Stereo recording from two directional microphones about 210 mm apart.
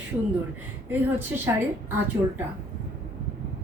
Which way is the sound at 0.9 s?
10° right (ahead or behind).